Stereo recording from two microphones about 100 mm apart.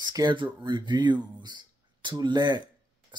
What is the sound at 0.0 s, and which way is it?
Speech, 45° right (ahead or behind).